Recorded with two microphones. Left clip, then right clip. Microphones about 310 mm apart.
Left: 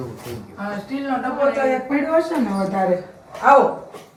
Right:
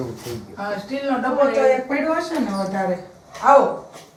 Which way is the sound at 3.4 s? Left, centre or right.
Left.